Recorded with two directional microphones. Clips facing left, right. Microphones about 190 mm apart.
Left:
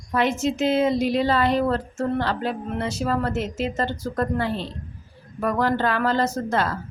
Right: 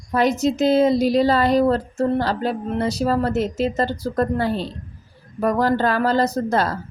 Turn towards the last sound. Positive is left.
turn(degrees=-40)  # may be behind; listen again after turning